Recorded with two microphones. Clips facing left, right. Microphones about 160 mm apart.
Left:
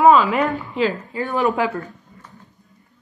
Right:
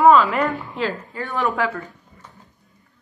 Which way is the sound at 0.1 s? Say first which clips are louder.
Even; 20° left (ahead or behind).